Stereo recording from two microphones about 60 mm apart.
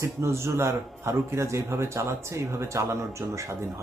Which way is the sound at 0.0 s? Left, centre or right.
Right.